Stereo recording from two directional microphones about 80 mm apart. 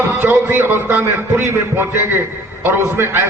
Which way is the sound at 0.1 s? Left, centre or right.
Right.